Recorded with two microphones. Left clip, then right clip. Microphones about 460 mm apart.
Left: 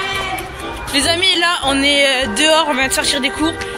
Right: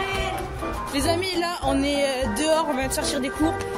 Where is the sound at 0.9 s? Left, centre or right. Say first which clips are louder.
Left 11 dB; right.